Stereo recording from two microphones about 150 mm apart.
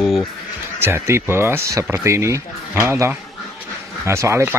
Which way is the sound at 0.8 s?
15° right (ahead or behind).